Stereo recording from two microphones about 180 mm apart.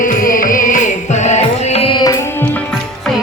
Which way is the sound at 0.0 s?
50° left (ahead or behind).